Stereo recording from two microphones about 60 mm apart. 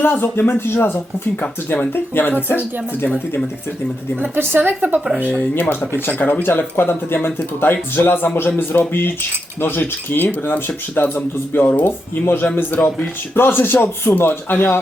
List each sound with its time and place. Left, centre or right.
0.0 s speech: left
4.2 s a woman's voice: right
5.3 s speech: left
12.8 s speech: left
13.3 s speech: left